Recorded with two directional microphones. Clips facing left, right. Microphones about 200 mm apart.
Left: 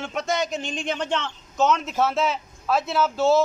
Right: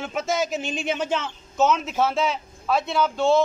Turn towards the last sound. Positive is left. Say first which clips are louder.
# even
turn(degrees=5)  # may be behind; listen again after turning